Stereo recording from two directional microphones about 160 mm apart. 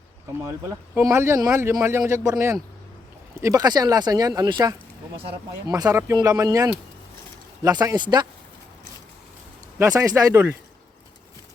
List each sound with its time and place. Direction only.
0.4 s speech: 20° right (ahead or behind)
9.7 s speech: 20° right (ahead or behind)